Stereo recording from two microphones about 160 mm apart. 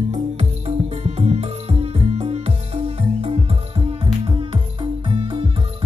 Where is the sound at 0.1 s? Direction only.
40° right (ahead or behind).